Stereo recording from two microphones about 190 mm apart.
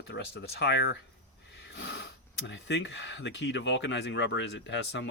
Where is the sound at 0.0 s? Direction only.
65° left (ahead or behind).